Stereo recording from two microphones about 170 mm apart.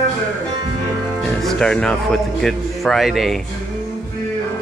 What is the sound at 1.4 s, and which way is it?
A man's voice, 5° left (ahead or behind).